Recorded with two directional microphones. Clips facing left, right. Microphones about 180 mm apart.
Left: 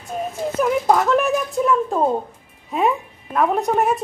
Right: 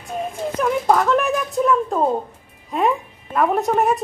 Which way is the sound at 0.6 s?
5° left (ahead or behind).